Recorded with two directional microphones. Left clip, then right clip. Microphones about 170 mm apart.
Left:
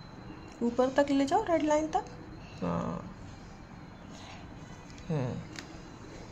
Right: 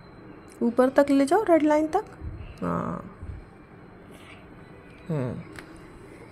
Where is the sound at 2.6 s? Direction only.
20° right (ahead or behind).